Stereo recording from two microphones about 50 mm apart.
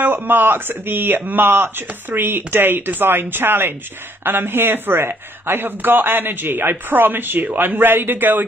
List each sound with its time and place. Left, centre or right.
0.0 s speech: right